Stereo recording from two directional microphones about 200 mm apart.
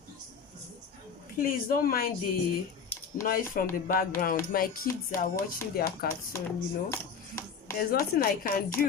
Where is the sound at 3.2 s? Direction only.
45° left (ahead or behind).